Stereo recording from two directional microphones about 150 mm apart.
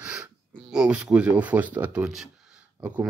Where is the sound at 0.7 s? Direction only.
5° right (ahead or behind).